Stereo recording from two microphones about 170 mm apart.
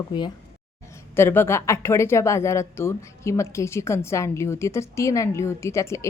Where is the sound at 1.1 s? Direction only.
15° left (ahead or behind).